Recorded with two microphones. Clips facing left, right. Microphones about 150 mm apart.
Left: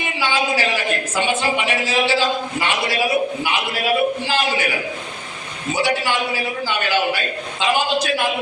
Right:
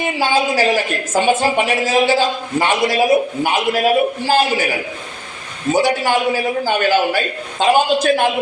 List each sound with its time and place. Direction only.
0.2 s a woman's voice: 40° right (ahead or behind)
5.7 s a woman's voice: 45° right (ahead or behind)